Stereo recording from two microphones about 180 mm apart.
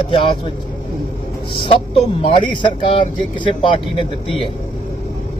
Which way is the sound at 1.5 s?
30° left (ahead or behind).